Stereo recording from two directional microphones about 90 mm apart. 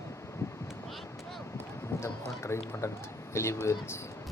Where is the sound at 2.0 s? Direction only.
30° left (ahead or behind).